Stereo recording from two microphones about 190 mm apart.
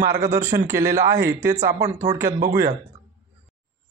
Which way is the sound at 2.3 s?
50° right (ahead or behind).